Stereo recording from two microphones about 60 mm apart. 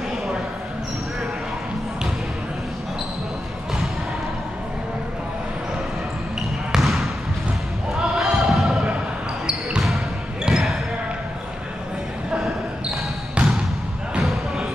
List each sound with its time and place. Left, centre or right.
6.7 s trickle: centre
7.9 s basketball bounce: centre
9.5 s a sound: centre
10.4 s basketball bounce: centre
13.3 s trickle: centre
14.2 s basketball bounce: centre